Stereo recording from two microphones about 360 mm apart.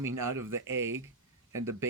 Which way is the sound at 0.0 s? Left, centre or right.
Centre.